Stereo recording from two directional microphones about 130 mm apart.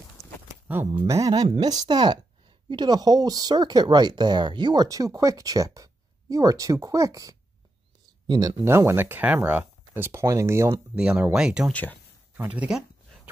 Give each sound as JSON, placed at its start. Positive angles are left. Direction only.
{"t": 1.0, "sound": "speech", "side_deg": -25}
{"t": 8.6, "sound": "speech", "side_deg": -20}
{"t": 11.0, "sound": "speech", "side_deg": -5}
{"t": 11.7, "sound": "speech", "side_deg": 15}
{"t": 12.4, "sound": "a sound", "side_deg": -10}